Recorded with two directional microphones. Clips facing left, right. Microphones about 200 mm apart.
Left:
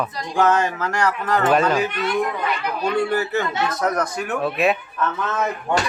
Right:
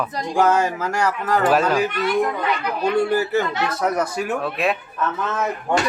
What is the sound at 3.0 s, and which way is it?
Speech, 10° right (ahead or behind).